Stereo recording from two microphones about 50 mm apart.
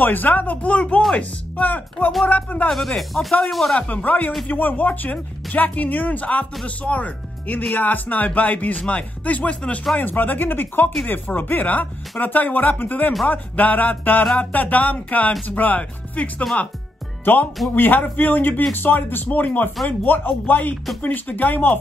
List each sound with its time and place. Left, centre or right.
0.0 s speech: left
2.7 s speech: centre
3.9 s speech: left